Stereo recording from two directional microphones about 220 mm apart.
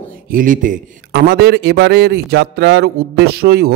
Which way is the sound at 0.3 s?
40° right (ahead or behind).